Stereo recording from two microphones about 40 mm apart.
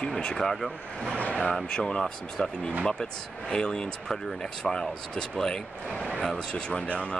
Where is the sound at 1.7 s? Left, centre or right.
Left.